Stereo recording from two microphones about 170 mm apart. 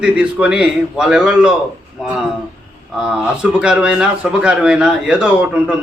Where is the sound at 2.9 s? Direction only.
5° right (ahead or behind).